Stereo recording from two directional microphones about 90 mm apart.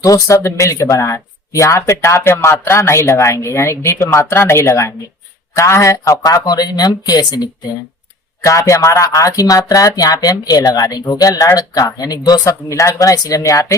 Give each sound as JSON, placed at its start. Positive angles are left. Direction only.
{"t": 0.0, "sound": "speech", "side_deg": 35}
{"t": 8.4, "sound": "speech", "side_deg": 35}